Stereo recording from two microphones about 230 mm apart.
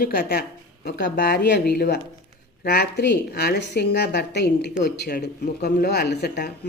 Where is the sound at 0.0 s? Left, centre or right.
Left.